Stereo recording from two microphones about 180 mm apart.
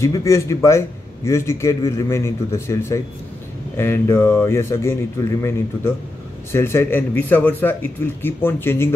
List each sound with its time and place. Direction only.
0.0 s a man's voice: 15° left (ahead or behind)